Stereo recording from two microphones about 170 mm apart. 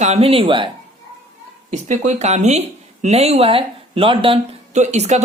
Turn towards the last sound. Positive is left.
turn(degrees=-40)  # may be behind; listen again after turning